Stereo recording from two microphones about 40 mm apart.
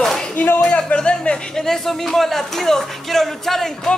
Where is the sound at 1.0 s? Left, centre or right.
Left.